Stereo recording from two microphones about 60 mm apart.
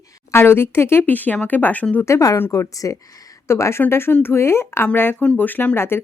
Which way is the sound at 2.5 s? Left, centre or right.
Left.